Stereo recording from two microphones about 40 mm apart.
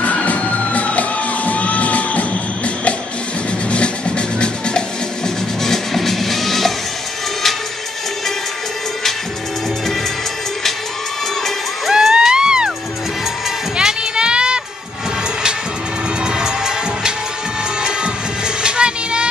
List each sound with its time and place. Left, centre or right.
0.0 s music: left
4.4 s music: left
5.6 s music: centre
11.9 s music: centre
13.7 s music: right
16.3 s music: centre
18.6 s music: right